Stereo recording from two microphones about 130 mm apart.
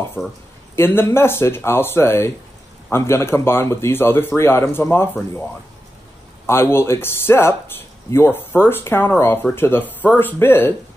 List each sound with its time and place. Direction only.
0.2 s speech: 10° left (ahead or behind)
0.7 s speech: 20° left (ahead or behind)
6.4 s speech: 20° left (ahead or behind)